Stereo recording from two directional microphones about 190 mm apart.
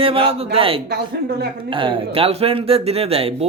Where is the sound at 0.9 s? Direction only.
60° right (ahead or behind).